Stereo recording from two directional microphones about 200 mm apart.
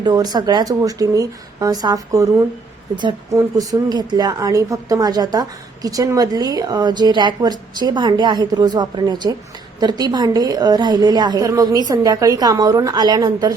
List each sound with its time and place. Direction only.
0.0 s speech: 20° right (ahead or behind)